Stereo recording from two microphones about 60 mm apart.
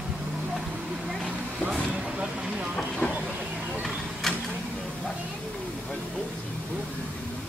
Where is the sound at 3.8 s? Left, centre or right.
Centre.